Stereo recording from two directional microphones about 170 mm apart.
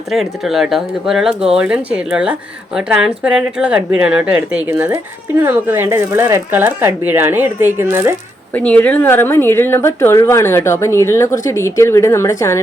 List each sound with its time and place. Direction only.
0.1 s speech: centre (ahead or behind)
8.5 s a woman's voice: 10° left (ahead or behind)